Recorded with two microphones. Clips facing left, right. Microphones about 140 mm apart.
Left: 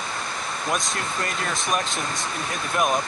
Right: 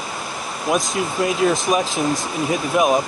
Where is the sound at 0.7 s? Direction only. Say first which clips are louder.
Right 8 dB; centre (ahead or behind).